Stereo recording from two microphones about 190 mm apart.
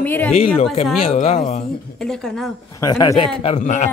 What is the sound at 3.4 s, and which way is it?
Speech, 35° left (ahead or behind).